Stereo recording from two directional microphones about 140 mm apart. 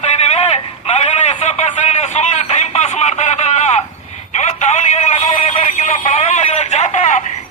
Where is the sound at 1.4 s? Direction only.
55° left (ahead or behind).